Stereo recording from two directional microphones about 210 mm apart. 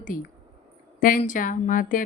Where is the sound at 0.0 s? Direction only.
40° left (ahead or behind).